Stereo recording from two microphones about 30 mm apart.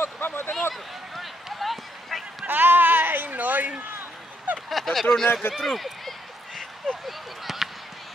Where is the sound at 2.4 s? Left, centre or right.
Right.